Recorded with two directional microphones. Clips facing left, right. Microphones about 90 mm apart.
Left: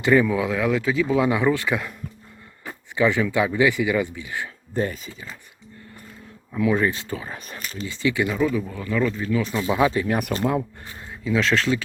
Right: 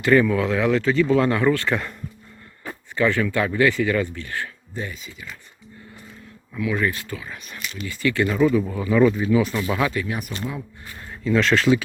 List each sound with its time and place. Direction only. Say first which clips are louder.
0.1 s speech: right 1 dB; 10° left (ahead or behind)
2.6 s speech: even; 15° left (ahead or behind)
4.7 s speech: left 7 dB; 45° left (ahead or behind)
6.5 s speech: left 3 dB; 30° left (ahead or behind)
7.9 s speech: right 1 dB; 20° left (ahead or behind)
8.4 s speech: right 4 dB; centre (ahead or behind)
9.6 s speech: left 3 dB; 20° left (ahead or behind)
10.3 s speech: left 6 dB; 50° left (ahead or behind)
11.1 s speech: right 2 dB; 5° left (ahead or behind)